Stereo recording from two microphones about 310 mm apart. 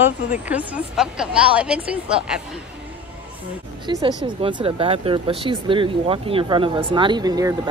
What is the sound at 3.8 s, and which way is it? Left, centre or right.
Speech, centre.